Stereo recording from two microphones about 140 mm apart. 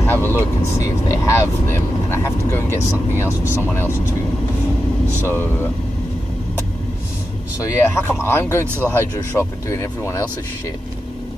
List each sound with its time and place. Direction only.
0.0 s speech: 15° left (ahead or behind)
5.2 s speech: 15° left (ahead or behind)
7.6 s speech: 20° left (ahead or behind)